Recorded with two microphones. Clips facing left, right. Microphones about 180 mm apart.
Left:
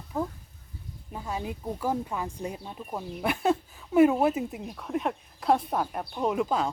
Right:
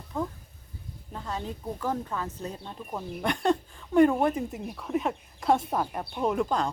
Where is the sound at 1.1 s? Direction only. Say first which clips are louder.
Left 1 dB; 10° left (ahead or behind).